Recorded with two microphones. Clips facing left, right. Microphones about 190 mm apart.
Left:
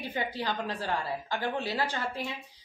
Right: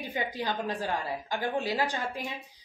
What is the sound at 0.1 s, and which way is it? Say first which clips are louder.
A woman's voice: right 1 dB; 15° right (ahead or behind).